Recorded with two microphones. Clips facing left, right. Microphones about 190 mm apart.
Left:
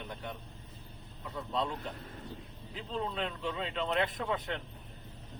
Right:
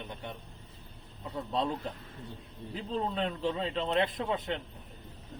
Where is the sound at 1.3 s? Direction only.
35° right (ahead or behind).